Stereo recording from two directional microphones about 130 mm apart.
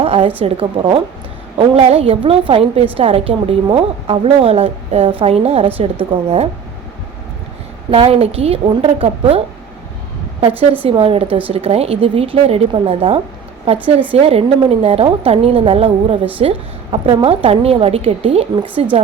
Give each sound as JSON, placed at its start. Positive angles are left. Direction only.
{"t": 0.0, "sound": "a sound", "side_deg": -45}
{"t": 0.4, "sound": "a woman's voice", "side_deg": -45}
{"t": 7.9, "sound": "a woman's voice", "side_deg": -45}
{"t": 10.8, "sound": "a woman's voice", "side_deg": -45}